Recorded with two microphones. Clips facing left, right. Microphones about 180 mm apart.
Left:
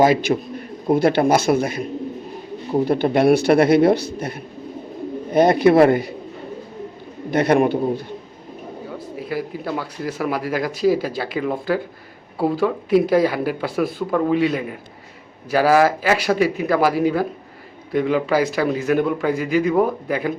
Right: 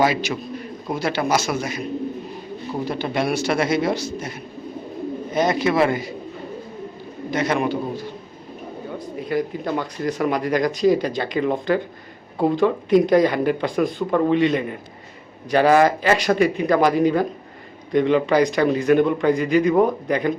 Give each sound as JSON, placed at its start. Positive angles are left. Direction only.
{"t": 0.0, "sound": "a man's voice", "side_deg": 50}
{"t": 7.3, "sound": "a man's voice", "side_deg": 60}
{"t": 8.9, "sound": "speech", "side_deg": 5}